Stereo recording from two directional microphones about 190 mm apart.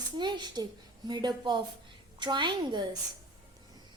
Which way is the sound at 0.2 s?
25° right (ahead or behind).